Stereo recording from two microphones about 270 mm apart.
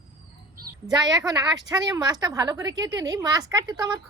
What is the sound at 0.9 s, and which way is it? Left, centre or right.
A woman's voice, centre.